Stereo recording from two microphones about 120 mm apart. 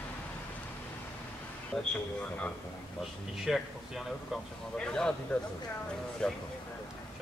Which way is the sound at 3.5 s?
Centre (ahead or behind).